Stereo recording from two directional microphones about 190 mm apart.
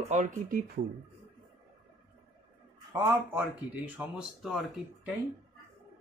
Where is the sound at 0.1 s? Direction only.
40° right (ahead or behind).